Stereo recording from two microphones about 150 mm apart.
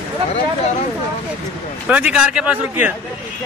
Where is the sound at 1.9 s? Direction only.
10° right (ahead or behind).